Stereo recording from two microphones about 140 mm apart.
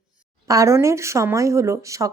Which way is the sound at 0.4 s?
25° right (ahead or behind).